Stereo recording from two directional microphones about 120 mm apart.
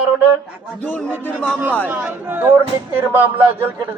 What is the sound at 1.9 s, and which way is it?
A man's voice, 15° right (ahead or behind).